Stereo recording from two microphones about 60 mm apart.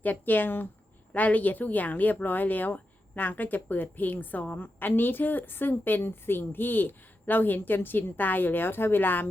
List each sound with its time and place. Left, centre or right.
0.0 s speech: left